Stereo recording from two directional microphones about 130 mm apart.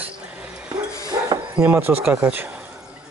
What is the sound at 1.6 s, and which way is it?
Speech, 15° right (ahead or behind).